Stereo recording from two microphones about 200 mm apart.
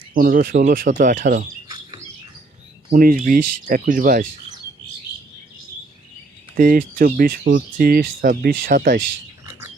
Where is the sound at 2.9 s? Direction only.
45° right (ahead or behind).